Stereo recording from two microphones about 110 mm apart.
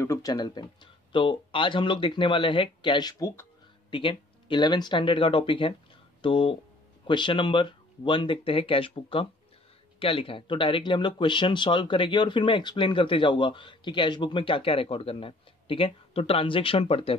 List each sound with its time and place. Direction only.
0.0 s speech: 30° left (ahead or behind)
3.9 s speech: 50° left (ahead or behind)